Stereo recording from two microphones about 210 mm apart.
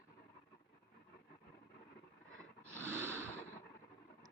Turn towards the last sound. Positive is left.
turn(degrees=-10)  # may be behind; listen again after turning